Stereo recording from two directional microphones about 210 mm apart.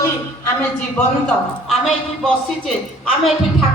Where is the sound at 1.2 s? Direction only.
Centre (ahead or behind).